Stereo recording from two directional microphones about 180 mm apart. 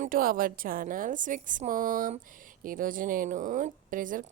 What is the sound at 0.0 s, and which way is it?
A woman's voice, 50° right (ahead or behind).